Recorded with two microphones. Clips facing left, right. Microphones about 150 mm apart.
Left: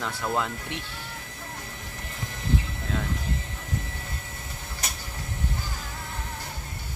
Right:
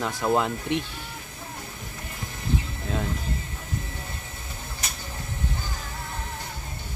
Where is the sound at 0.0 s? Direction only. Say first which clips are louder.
Right 5 dB; 15° right (ahead or behind).